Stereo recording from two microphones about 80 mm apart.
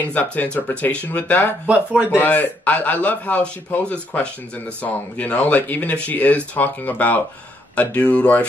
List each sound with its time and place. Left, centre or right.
0.1 s speech: centre
1.7 s speech: centre
2.0 s speech: left